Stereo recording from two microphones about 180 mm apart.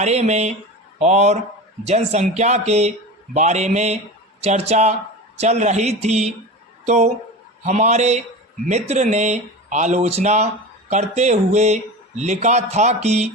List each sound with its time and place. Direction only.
0.0 s speech: 40° right (ahead or behind)